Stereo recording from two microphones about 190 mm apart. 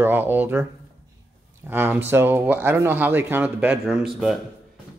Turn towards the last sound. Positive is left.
turn(degrees=0)  # may be behind; listen again after turning